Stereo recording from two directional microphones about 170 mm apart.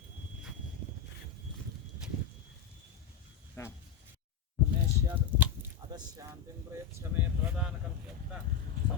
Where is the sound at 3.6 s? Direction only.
15° left (ahead or behind).